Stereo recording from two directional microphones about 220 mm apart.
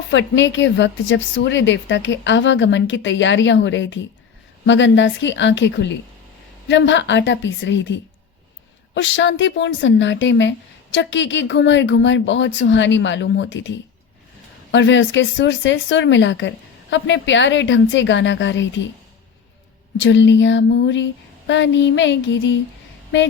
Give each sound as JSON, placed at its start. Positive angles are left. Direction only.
{"t": 0.1, "sound": "speech", "side_deg": 55}
{"t": 20.0, "sound": "speech", "side_deg": 55}